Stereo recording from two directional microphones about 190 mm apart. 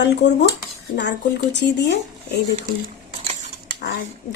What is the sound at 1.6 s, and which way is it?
Speech, 65° left (ahead or behind).